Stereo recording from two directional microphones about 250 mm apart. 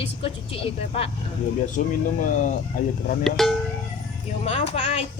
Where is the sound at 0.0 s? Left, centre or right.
Left.